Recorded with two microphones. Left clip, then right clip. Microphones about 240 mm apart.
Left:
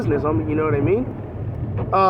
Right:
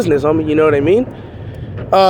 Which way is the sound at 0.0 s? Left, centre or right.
Right.